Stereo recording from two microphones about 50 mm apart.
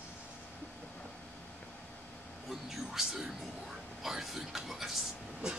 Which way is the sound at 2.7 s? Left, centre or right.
Centre.